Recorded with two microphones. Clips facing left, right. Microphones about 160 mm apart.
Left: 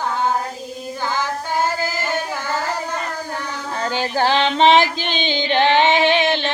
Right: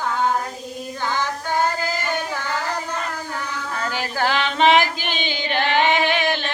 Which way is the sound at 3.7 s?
30° left (ahead or behind).